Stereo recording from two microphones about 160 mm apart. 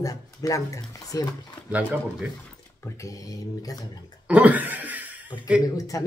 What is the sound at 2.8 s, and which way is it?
Speech, 20° left (ahead or behind).